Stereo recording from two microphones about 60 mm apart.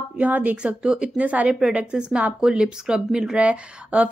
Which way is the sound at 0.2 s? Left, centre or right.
Right.